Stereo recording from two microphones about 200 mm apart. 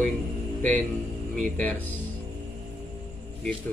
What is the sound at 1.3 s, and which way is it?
Speech, 40° right (ahead or behind).